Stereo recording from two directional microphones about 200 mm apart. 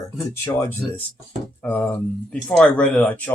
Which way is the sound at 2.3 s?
5° left (ahead or behind).